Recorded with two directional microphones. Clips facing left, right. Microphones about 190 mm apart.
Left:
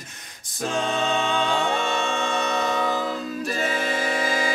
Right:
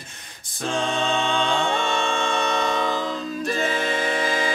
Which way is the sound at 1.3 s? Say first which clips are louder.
Even; 5° left (ahead or behind).